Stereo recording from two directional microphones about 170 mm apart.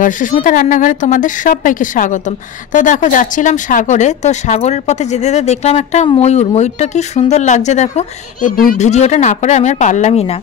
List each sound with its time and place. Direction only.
0.0 s speech: 50° left (ahead or behind)